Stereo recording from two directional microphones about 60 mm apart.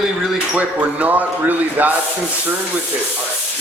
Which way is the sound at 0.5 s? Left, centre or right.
Right.